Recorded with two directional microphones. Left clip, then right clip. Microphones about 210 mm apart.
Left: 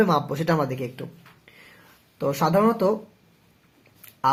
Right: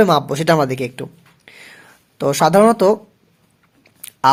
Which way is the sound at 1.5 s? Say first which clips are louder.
Right 11 dB; 50° right (ahead or behind).